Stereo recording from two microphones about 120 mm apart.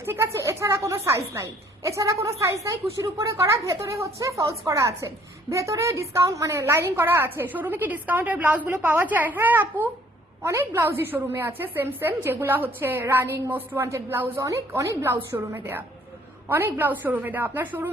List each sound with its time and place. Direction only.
0.0 s a woman's voice: 20° right (ahead or behind)